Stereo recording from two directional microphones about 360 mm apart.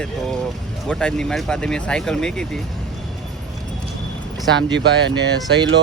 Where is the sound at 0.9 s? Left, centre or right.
Centre.